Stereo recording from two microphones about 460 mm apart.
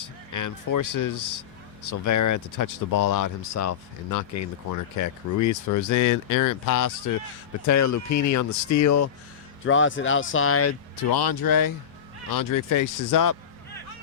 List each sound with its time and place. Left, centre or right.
0.0 s speech: left
9.6 s speech: left
10.9 s speech: left